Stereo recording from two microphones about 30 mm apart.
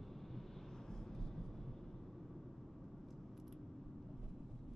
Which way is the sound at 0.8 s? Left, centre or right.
Centre.